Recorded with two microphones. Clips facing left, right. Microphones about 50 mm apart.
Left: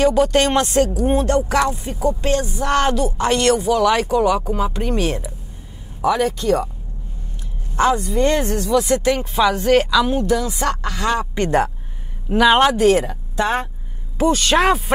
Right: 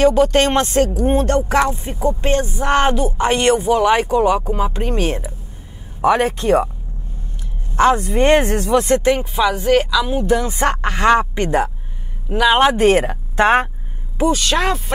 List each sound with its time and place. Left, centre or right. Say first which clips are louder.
0.0 s speech: right 2 dB; right
7.7 s a woman's voice: right 3 dB; right
9.3 s a woman's voice: left 4 dB; centre
10.2 s speech: right 2 dB; right
12.3 s a woman's voice: left 1 dB; centre
12.7 s speech: right 1 dB; right
14.3 s speech: left 5 dB; centre